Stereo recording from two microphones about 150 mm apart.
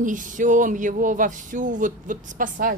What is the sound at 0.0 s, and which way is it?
Speech, 60° right (ahead or behind).